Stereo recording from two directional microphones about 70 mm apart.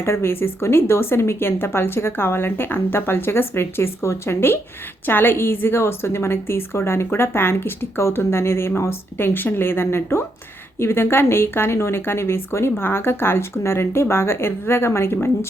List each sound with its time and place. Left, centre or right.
0.0 s a woman's voice: left